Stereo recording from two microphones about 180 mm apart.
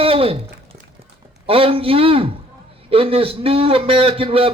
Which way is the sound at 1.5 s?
30° right (ahead or behind).